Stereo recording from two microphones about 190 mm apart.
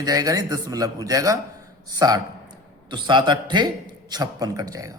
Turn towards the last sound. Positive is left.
turn(degrees=-20)  # may be behind; listen again after turning